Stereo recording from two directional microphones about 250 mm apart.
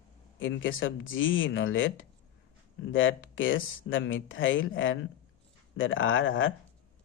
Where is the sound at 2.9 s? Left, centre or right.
Left.